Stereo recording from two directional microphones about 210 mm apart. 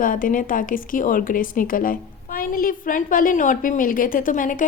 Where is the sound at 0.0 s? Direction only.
40° left (ahead or behind).